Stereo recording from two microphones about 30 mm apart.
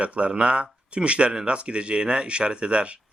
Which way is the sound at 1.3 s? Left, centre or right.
Right.